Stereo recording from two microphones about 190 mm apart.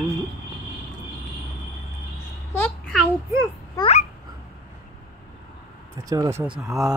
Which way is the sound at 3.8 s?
35° left (ahead or behind).